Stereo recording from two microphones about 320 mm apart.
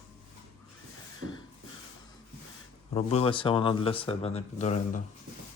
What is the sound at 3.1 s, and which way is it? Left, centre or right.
Speech, centre.